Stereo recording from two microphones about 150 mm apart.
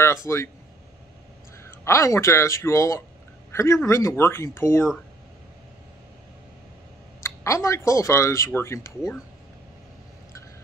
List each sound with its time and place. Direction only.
0.0 s speech: 20° left (ahead or behind)
1.6 s speech: 20° left (ahead or behind)
7.2 s speech: 20° left (ahead or behind)